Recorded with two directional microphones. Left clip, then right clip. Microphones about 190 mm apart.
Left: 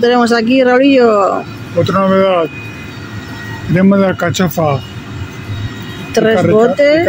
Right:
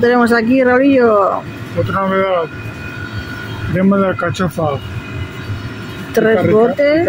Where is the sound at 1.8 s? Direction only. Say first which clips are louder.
Left 4 dB; 50° left (ahead or behind).